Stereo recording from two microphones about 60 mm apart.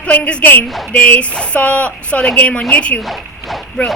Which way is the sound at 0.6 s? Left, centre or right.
Centre.